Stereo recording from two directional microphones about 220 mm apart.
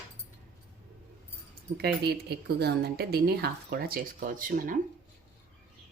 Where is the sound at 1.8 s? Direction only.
45° right (ahead or behind).